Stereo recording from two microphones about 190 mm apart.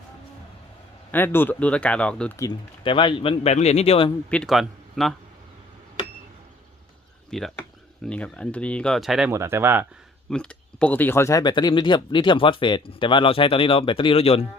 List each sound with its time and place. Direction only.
1.1 s speech: 10° left (ahead or behind)
2.4 s speech: 25° left (ahead or behind)
4.3 s speech: 5° left (ahead or behind)
7.3 s speech: centre (ahead or behind)
9.3 s speech: 15° right (ahead or behind)
10.2 s speech: 5° left (ahead or behind); by 14.4 s 30° left (ahead or behind)